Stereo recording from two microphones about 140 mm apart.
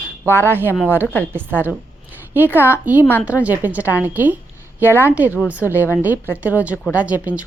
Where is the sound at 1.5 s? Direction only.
10° left (ahead or behind).